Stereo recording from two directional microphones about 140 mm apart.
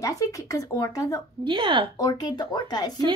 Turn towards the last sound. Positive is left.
turn(degrees=30)  # may be behind; listen again after turning